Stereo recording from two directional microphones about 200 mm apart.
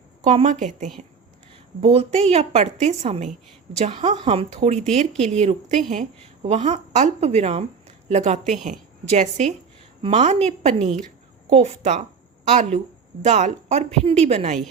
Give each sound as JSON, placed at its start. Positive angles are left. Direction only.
{"t": 0.3, "sound": "speech", "side_deg": -35}